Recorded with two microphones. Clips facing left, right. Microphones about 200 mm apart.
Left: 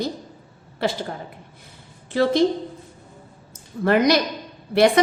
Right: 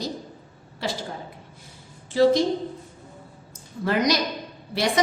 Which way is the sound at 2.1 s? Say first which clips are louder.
Right 2 dB; 60° left (ahead or behind).